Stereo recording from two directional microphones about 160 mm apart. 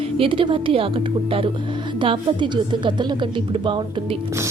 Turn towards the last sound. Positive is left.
turn(degrees=-30)  # may be behind; listen again after turning